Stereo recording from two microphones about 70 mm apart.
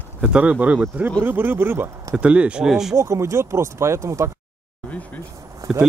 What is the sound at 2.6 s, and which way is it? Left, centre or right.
Speech, centre.